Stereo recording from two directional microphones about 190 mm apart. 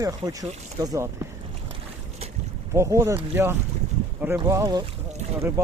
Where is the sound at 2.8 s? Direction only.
15° right (ahead or behind).